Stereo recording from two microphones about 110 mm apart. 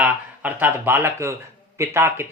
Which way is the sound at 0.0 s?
15° right (ahead or behind).